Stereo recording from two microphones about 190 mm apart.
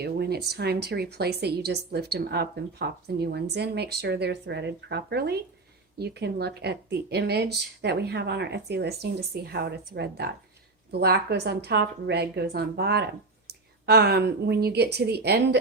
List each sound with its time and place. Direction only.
0.0 s speech: 60° right (ahead or behind)